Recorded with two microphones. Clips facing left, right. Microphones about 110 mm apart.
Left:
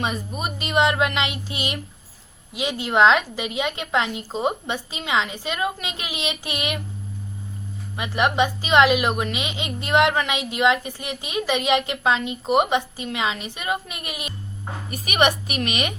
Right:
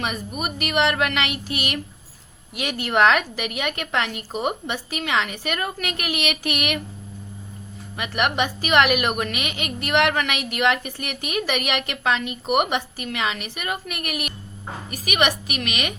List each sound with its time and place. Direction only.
0.3 s a woman's voice: 25° left (ahead or behind)
7.9 s a woman's voice: 25° left (ahead or behind)